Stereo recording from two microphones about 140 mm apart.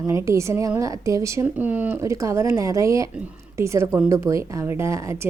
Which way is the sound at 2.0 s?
20° right (ahead or behind).